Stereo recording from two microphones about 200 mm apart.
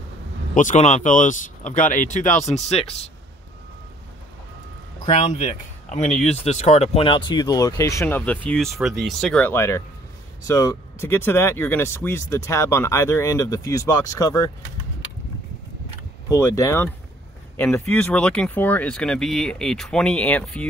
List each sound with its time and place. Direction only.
0.6 s speech: 35° left (ahead or behind)
5.0 s speech: 25° left (ahead or behind)
16.3 s speech: 15° left (ahead or behind)